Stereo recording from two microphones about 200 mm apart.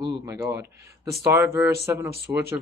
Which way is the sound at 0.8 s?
15° right (ahead or behind).